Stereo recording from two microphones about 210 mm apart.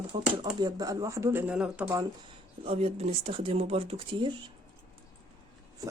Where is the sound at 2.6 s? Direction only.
30° right (ahead or behind).